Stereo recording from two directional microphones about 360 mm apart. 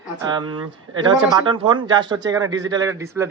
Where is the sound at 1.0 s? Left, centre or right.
Centre.